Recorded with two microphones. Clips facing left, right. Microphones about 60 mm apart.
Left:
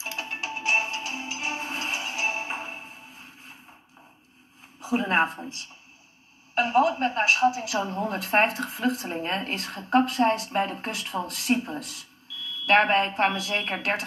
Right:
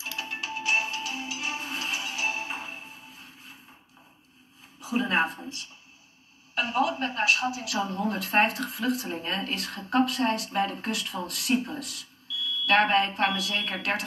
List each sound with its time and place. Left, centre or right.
0.0 s music: left
4.7 s speech: left
6.5 s speech: left